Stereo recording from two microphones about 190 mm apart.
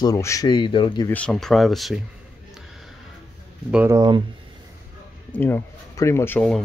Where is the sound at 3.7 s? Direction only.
10° right (ahead or behind).